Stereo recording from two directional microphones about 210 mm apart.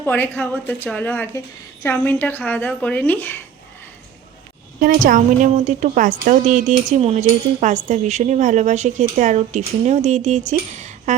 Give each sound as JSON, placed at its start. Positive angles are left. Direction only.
{"t": 0.0, "sound": "speech", "side_deg": 10}
{"t": 4.8, "sound": "speech", "side_deg": -40}